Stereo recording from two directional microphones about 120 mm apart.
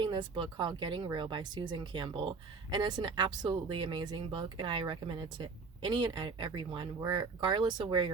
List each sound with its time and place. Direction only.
0.0 s speech: 40° right (ahead or behind)